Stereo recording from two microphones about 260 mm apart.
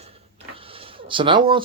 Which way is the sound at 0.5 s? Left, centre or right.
Right.